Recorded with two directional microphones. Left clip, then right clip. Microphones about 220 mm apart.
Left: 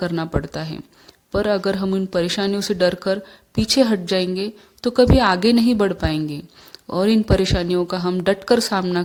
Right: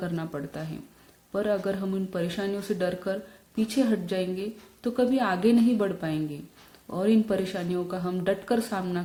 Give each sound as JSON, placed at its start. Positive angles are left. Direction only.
{"t": 0.0, "sound": "speech", "side_deg": 45}